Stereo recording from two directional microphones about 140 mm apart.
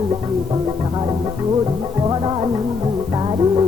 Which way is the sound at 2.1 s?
30° right (ahead or behind).